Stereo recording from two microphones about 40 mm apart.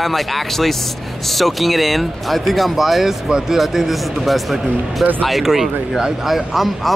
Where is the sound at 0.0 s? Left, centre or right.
Centre.